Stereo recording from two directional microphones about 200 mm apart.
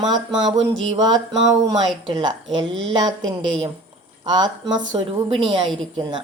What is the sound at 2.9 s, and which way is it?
A woman's voice, 20° right (ahead or behind).